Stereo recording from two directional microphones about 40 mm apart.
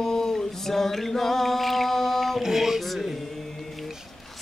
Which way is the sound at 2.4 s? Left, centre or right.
Centre.